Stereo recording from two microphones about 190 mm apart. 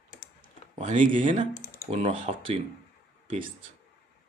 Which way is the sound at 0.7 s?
30° right (ahead or behind).